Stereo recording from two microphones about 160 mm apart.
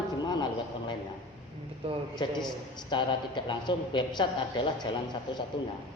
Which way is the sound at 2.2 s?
25° left (ahead or behind).